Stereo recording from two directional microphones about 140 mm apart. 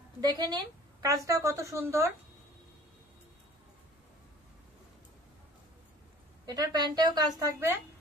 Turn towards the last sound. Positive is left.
turn(degrees=-20)  # may be behind; listen again after turning